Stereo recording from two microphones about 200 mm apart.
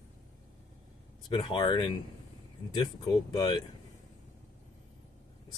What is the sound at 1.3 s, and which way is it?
Speech, 25° left (ahead or behind).